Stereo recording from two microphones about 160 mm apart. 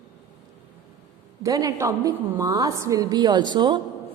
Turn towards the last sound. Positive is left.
turn(degrees=-25)  # may be behind; listen again after turning